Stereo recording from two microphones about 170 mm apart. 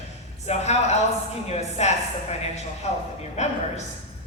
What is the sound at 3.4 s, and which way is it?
Speech, 40° left (ahead or behind).